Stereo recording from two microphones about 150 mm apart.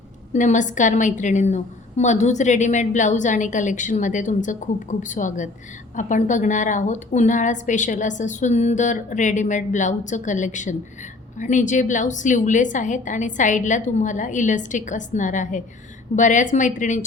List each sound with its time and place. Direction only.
0.3 s a woman's voice: 55° left (ahead or behind)